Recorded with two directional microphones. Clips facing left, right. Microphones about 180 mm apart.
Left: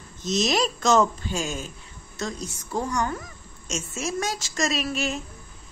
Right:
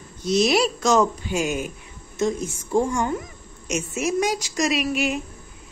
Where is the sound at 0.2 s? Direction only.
10° right (ahead or behind).